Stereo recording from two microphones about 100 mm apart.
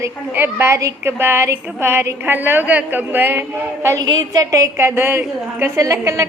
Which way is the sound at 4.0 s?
45° right (ahead or behind).